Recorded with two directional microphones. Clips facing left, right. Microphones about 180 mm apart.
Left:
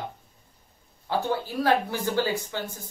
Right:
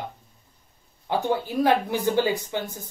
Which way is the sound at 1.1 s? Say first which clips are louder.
Right 3 dB; 20° right (ahead or behind).